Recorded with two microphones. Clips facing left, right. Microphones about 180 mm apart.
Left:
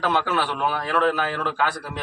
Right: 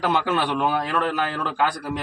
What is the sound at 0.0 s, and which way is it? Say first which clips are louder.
A man's voice: right 1 dB; 15° right (ahead or behind).